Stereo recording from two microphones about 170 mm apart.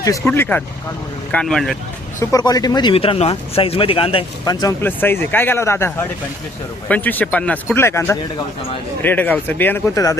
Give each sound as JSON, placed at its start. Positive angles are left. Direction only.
{"t": 0.0, "sound": "speech", "side_deg": 15}
{"t": 2.1, "sound": "speech", "side_deg": 20}
{"t": 4.8, "sound": "speech", "side_deg": 10}